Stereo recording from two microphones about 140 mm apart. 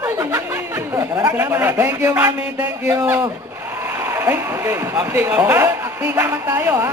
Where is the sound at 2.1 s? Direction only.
20° right (ahead or behind).